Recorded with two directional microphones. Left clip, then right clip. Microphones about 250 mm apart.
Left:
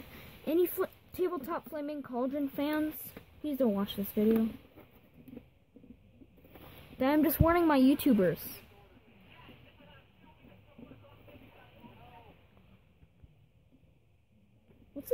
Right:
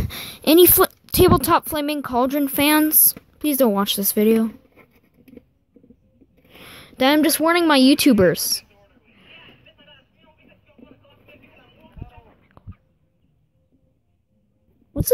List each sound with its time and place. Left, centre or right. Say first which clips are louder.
0.1 s a woman's voice: right 17 dB; right
7.0 s speech: right 11 dB; centre